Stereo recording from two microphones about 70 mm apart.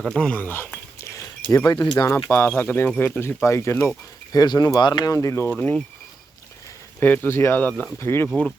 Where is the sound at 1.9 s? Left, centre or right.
Left.